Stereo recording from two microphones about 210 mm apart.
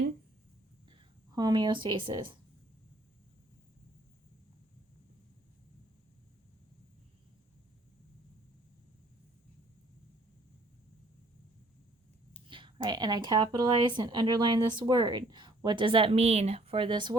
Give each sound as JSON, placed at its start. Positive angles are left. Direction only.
{"t": 1.4, "sound": "speech", "side_deg": -20}
{"t": 12.5, "sound": "speech", "side_deg": -25}